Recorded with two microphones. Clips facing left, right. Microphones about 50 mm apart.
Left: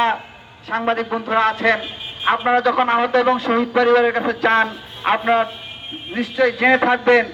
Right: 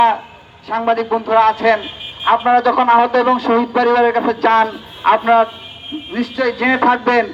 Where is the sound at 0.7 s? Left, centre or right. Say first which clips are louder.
Right 3 dB; centre.